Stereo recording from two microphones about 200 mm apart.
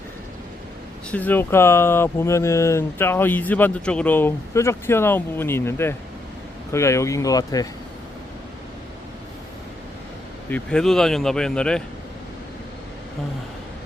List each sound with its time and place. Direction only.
1.1 s speech: 10° left (ahead or behind)
10.5 s speech: 5° left (ahead or behind)